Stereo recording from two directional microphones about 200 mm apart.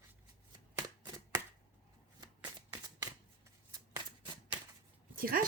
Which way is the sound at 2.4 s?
15° right (ahead or behind).